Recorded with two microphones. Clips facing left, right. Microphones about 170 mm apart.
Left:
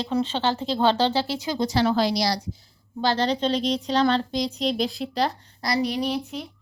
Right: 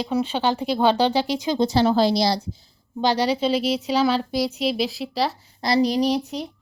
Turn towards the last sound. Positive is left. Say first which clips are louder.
# right 5 dB
turn(degrees=-40)  # may be behind; listen again after turning